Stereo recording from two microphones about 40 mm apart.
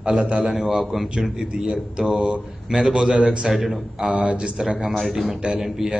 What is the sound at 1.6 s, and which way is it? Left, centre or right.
Speech, centre.